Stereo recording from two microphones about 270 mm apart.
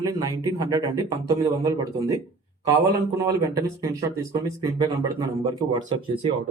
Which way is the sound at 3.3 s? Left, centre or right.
Centre.